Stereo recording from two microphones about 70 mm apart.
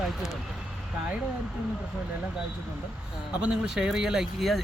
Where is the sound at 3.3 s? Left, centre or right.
Centre.